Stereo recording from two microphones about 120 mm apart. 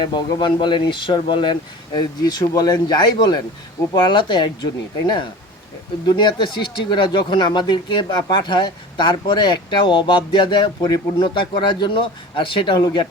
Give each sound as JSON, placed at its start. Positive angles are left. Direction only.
{"t": 0.0, "sound": "a man's voice", "side_deg": 40}